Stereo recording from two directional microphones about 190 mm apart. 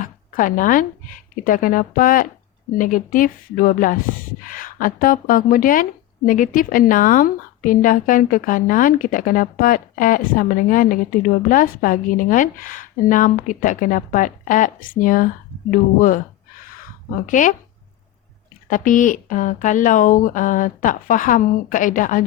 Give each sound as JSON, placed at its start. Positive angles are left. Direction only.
{"t": 0.0, "sound": "a woman's voice", "side_deg": 45}
{"t": 17.2, "sound": "a woman's voice", "side_deg": 40}
{"t": 18.7, "sound": "a woman's voice", "side_deg": 45}